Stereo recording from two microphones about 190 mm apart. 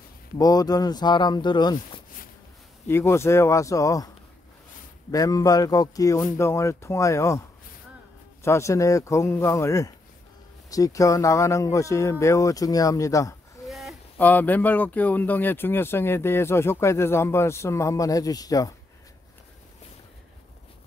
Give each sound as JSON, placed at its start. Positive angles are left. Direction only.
{"t": 0.4, "sound": "speech", "side_deg": 20}
{"t": 2.9, "sound": "speech", "side_deg": 15}
{"t": 5.1, "sound": "speech", "side_deg": 20}
{"t": 13.7, "sound": "speech", "side_deg": 0}